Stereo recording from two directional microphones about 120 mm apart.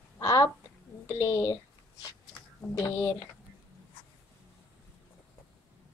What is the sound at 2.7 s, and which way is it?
Speech, 20° left (ahead or behind).